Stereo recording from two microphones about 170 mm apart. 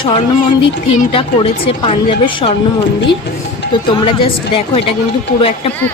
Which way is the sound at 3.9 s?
30° left (ahead or behind).